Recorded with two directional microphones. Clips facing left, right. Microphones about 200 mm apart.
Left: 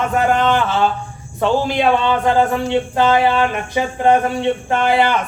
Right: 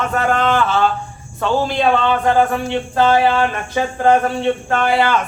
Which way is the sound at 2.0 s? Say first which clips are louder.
Even; 20° left (ahead or behind).